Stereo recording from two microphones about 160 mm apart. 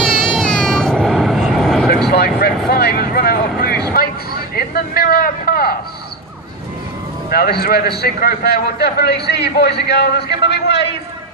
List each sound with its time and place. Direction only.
0.0 s vehicle: centre (ahead or behind)
2.1 s vehicle: 85° left
4.5 s a sound: 70° left (ahead or behind)
7.3 s a man's voice: 70° left (ahead or behind); by 10.8 s 90° left